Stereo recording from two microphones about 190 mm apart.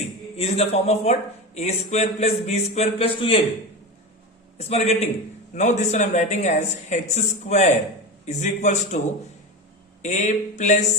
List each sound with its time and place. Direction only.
0.3 s speech: 30° left (ahead or behind)
4.5 s speech: 35° left (ahead or behind)
10.0 s speech: 40° left (ahead or behind)